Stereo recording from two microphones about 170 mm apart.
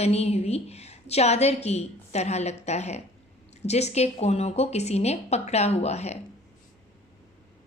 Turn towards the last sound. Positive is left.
turn(degrees=40)  # may be behind; listen again after turning